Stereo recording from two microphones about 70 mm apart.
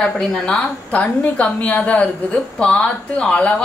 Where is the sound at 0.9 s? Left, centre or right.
Centre.